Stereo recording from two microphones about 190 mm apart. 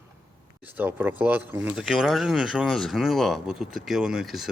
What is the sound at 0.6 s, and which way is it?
Speech, 10° right (ahead or behind).